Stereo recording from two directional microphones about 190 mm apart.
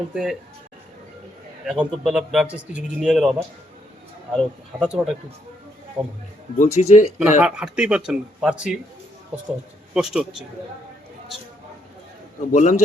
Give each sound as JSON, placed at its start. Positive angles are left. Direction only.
{"t": 0.1, "sound": "a man's voice", "side_deg": -5}
{"t": 1.6, "sound": "a man's voice", "side_deg": -5}
{"t": 4.4, "sound": "a man's voice", "side_deg": -5}
{"t": 6.6, "sound": "speech", "side_deg": 40}
{"t": 7.2, "sound": "a man's voice", "side_deg": -5}
{"t": 9.9, "sound": "a man's voice", "side_deg": -5}
{"t": 12.5, "sound": "speech", "side_deg": 40}